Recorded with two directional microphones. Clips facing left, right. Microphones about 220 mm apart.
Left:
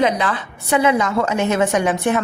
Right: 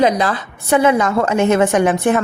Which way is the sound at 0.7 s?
50° right (ahead or behind).